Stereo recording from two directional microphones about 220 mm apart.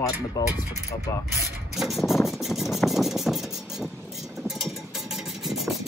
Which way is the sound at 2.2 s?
Centre (ahead or behind).